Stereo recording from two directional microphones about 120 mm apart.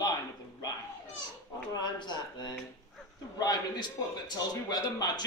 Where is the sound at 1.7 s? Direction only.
35° left (ahead or behind).